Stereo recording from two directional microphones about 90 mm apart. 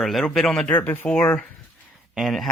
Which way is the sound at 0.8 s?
20° left (ahead or behind).